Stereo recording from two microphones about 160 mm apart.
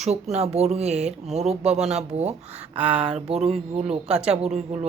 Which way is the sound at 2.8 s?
10° right (ahead or behind).